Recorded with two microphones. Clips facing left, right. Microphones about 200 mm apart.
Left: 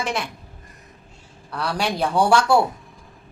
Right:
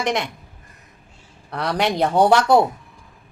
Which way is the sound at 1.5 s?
20° right (ahead or behind).